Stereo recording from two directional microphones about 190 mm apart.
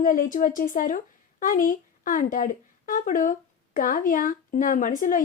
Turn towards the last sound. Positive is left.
turn(degrees=45)  # may be behind; listen again after turning